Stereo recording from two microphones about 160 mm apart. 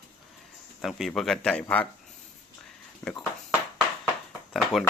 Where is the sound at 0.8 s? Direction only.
Centre (ahead or behind).